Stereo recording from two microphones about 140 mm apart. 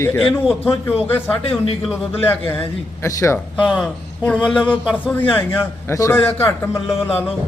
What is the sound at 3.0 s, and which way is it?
Speech, 20° left (ahead or behind).